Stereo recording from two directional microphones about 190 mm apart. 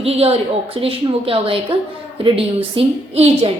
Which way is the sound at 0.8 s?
30° right (ahead or behind).